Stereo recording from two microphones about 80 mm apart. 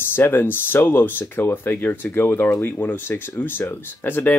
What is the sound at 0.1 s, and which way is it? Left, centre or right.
Speech, left.